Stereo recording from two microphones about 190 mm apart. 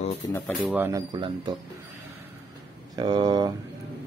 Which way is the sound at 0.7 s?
15° right (ahead or behind).